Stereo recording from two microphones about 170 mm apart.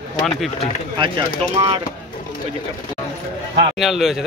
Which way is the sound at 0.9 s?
30° right (ahead or behind).